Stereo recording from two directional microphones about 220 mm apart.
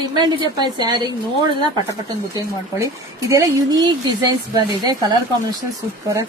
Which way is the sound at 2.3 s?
15° right (ahead or behind).